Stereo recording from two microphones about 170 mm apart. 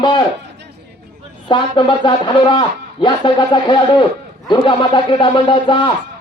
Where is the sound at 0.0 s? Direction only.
25° left (ahead or behind).